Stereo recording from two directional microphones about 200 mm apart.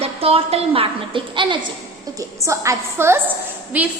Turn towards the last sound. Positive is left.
turn(degrees=-5)  # may be behind; listen again after turning